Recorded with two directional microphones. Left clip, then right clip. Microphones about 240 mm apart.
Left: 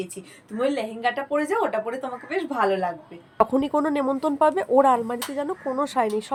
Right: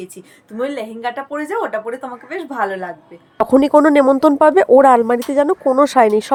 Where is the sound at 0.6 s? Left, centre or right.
Centre.